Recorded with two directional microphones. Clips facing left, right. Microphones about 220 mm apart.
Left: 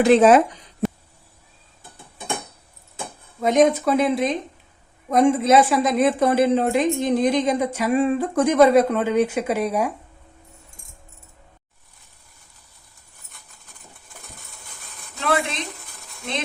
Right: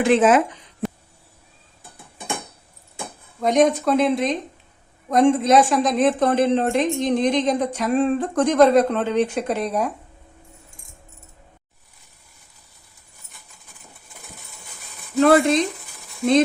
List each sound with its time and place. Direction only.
0.0 s speech: 40° left (ahead or behind)
3.4 s a woman's voice: 5° left (ahead or behind)
15.2 s speech: 45° right (ahead or behind)